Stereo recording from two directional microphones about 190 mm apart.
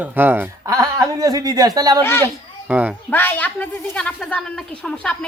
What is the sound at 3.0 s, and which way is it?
A woman's voice, 10° left (ahead or behind).